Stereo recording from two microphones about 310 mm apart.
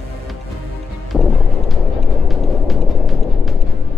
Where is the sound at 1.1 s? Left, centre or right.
Centre.